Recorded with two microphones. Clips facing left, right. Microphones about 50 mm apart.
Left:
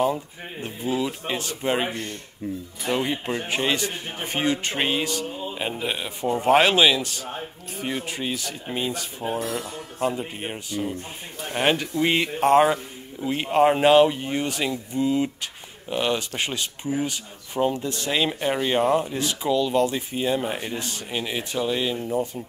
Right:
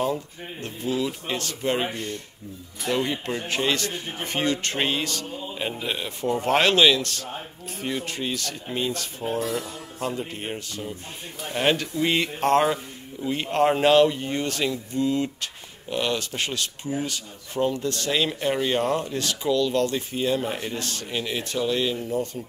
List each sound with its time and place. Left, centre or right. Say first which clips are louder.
0.0 s a man's voice: left 3 dB; centre
9.7 s a man's voice: left 4 dB; centre